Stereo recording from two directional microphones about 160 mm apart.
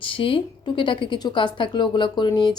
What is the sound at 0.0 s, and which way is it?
Speech, 35° left (ahead or behind).